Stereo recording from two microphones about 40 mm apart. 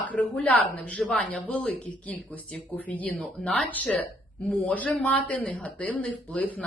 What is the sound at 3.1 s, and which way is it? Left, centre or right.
Speech, centre.